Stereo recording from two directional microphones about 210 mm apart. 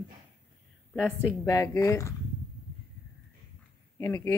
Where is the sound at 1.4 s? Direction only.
15° left (ahead or behind).